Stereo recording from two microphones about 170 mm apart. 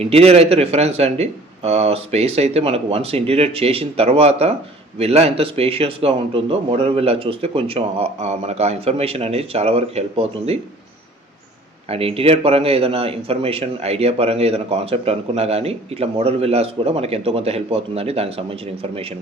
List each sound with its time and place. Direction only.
0.0 s speech: 35° right (ahead or behind)
11.9 s speech: 35° right (ahead or behind)